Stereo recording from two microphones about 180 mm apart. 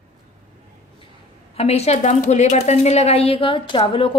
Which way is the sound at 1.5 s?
35° left (ahead or behind).